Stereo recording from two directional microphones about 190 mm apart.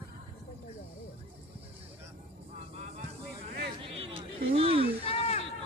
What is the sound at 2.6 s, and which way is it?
Vehicle, 35° right (ahead or behind).